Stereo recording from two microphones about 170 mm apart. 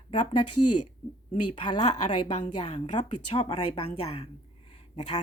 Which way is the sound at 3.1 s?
30° left (ahead or behind).